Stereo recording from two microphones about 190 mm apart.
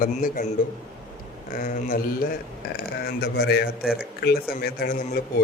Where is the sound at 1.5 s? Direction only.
45° left (ahead or behind).